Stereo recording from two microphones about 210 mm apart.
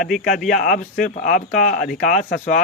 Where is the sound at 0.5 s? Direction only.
40° left (ahead or behind).